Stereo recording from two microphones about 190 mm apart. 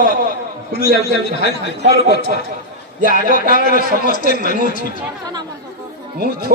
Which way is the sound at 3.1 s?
45° right (ahead or behind).